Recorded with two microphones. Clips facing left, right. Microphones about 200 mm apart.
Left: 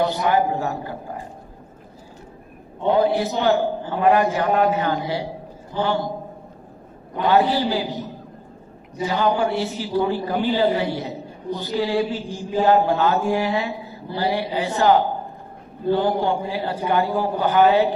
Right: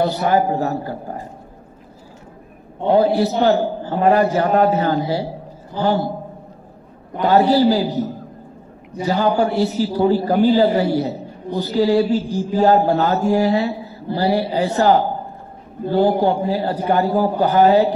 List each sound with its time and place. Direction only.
0.0 s a man's voice: 40° right (ahead or behind)
2.9 s a man's voice: 40° right (ahead or behind)
7.2 s a man's voice: 40° right (ahead or behind)
16.2 s a man's voice: 40° right (ahead or behind)